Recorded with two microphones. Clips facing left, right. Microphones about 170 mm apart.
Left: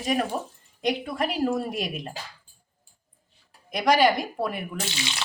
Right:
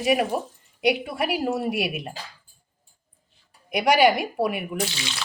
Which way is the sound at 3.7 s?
10° right (ahead or behind).